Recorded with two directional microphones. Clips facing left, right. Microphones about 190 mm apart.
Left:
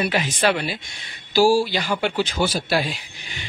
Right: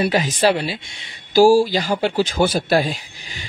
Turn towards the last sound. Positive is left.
turn(degrees=-45)  # may be behind; listen again after turning